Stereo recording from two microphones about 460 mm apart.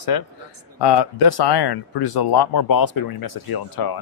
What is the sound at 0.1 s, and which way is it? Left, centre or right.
Speech, left.